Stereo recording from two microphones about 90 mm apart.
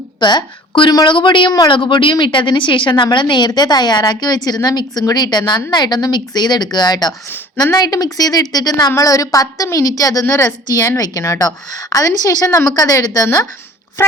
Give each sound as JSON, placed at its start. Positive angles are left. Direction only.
{"t": 0.2, "sound": "a woman's voice", "side_deg": 55}